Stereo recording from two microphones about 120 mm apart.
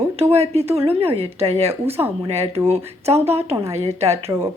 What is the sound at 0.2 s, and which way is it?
A woman's voice, 60° right (ahead or behind).